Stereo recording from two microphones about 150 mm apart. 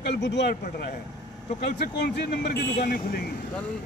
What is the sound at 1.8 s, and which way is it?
Speech, 90° left.